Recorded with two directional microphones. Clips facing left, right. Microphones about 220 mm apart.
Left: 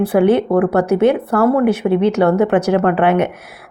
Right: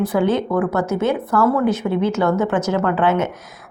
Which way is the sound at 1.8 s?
40° left (ahead or behind).